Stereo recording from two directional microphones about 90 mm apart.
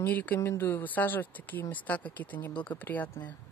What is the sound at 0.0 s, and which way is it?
Speech, 20° left (ahead or behind).